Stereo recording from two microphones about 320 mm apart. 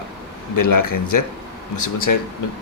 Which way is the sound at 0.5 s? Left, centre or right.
Left.